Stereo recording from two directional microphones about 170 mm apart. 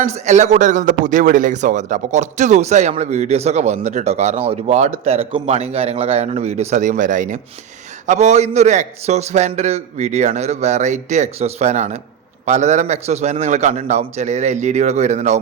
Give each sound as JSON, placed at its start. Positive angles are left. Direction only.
{"t": 0.0, "sound": "a man's voice", "side_deg": -40}